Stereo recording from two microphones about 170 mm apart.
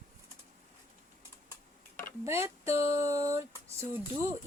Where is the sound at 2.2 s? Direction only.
15° right (ahead or behind).